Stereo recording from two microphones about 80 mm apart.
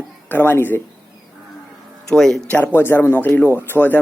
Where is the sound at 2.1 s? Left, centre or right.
Centre.